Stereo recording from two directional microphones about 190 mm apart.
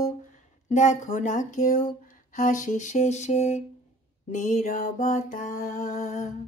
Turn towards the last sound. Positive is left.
turn(degrees=40)  # may be behind; listen again after turning